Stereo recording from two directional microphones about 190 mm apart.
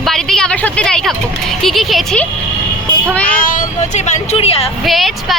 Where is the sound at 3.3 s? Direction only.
45° left (ahead or behind); by 4.6 s 30° left (ahead or behind).